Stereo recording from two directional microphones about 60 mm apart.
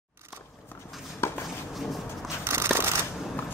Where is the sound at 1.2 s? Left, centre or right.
Left.